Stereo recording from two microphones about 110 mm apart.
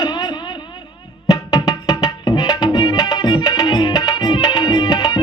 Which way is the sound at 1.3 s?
35° left (ahead or behind).